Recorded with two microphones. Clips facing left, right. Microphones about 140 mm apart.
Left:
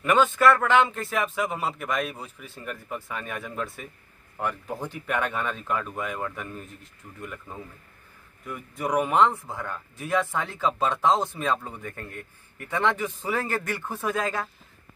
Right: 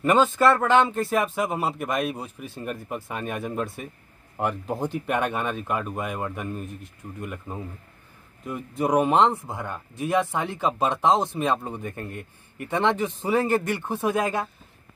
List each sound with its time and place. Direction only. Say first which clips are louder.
0.0 s speech: right 1 dB; 30° right (ahead or behind)
1.6 s a man's voice: right 3 dB; 10° right (ahead or behind)